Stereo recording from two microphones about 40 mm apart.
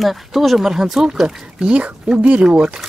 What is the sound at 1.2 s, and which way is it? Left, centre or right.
Speech, right.